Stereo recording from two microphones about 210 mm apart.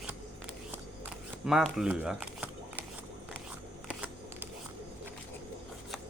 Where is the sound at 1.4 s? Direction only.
Centre (ahead or behind).